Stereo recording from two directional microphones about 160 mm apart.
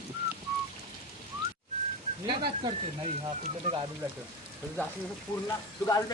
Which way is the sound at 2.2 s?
30° right (ahead or behind).